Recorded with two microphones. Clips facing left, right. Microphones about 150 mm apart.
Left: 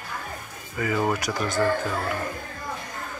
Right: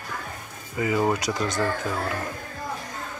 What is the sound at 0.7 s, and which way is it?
Speech, 20° right (ahead or behind).